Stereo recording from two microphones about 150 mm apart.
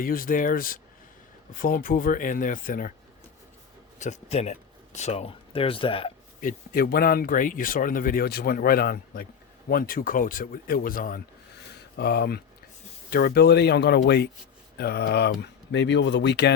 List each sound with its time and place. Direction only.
0.0 s speech: 70° left (ahead or behind)
3.9 s speech: 50° left (ahead or behind); by 6.1 s 35° left (ahead or behind)
6.4 s speech: 75° left (ahead or behind)
9.6 s speech: 75° left (ahead or behind)
12.0 s speech: 90° left